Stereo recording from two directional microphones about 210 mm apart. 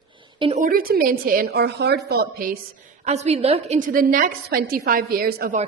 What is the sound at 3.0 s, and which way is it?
A woman's voice, 30° right (ahead or behind).